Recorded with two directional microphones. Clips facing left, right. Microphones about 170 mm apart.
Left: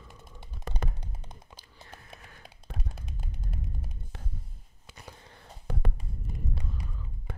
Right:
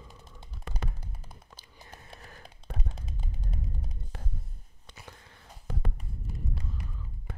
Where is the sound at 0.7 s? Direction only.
40° left (ahead or behind).